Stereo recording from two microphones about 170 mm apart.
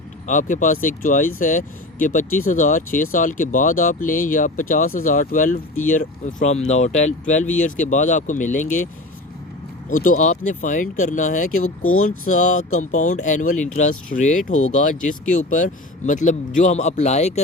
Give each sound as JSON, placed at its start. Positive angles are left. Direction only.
{"t": 0.3, "sound": "speech", "side_deg": 50}
{"t": 9.9, "sound": "speech", "side_deg": 50}